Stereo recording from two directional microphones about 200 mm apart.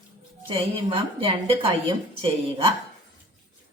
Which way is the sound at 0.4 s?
25° right (ahead or behind).